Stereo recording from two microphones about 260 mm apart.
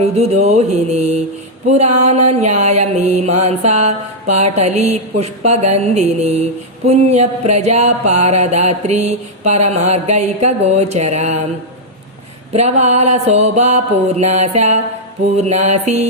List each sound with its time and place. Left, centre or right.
0.0 s mantra: right
12.5 s mantra: right